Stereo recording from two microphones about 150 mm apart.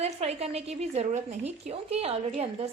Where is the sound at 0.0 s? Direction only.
45° right (ahead or behind).